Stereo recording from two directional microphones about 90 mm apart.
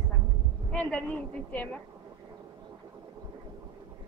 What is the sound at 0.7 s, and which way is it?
A woman's voice, 15° left (ahead or behind).